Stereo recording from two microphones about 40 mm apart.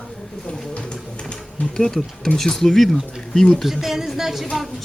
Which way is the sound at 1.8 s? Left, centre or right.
Centre.